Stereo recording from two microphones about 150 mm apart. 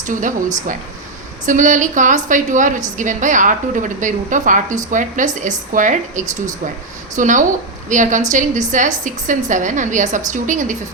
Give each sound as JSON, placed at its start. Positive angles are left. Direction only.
{"t": 0.0, "sound": "a woman's voice", "side_deg": -60}